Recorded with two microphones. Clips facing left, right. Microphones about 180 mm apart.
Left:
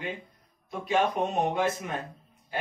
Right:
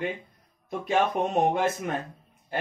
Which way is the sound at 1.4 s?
50° right (ahead or behind).